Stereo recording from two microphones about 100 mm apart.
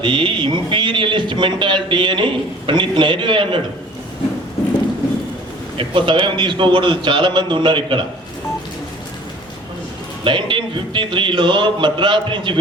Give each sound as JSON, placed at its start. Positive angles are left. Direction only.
{"t": 0.0, "sound": "a man's voice", "side_deg": -55}
{"t": 5.7, "sound": "a man's voice", "side_deg": -55}
{"t": 10.2, "sound": "a man's voice", "side_deg": -55}